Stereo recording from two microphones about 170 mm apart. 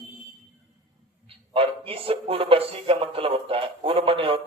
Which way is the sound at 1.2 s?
35° right (ahead or behind).